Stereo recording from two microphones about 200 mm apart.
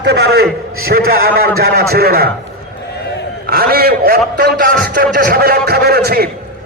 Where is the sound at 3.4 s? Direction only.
50° right (ahead or behind).